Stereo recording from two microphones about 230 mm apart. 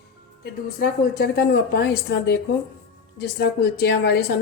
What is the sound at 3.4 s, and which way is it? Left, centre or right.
Speech, left.